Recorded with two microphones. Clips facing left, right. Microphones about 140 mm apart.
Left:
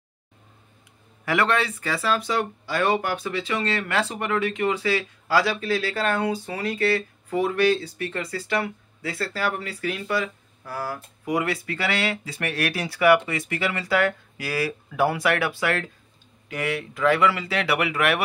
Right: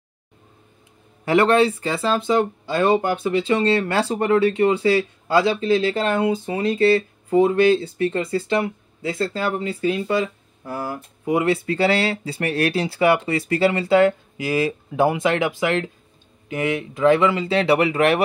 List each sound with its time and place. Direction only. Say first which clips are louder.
1.2 s speech: right 7 dB; 30° right (ahead or behind)